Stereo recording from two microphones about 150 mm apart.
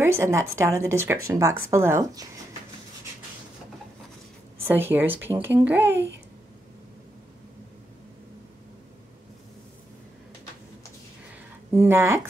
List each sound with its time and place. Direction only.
0.0 s speech: 20° right (ahead or behind)
4.6 s speech: 15° right (ahead or behind)
11.7 s speech: 15° right (ahead or behind)